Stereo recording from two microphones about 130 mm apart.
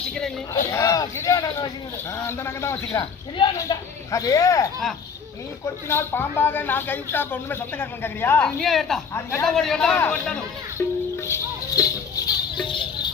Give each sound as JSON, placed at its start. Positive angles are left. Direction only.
{"t": 0.5, "sound": "a man's voice", "side_deg": 25}
{"t": 9.1, "sound": "speech", "side_deg": 20}
{"t": 9.5, "sound": "a man's voice", "side_deg": 5}
{"t": 10.8, "sound": "music", "side_deg": 20}